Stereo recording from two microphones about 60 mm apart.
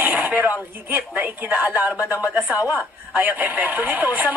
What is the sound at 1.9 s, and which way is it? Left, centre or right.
Speech, left.